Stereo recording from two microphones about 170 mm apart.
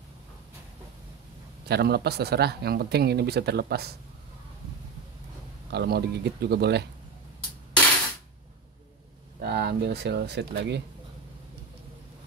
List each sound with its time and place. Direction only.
1.7 s speech: 70° right (ahead or behind)
5.7 s speech: 70° right (ahead or behind)
9.4 s speech: 70° right (ahead or behind)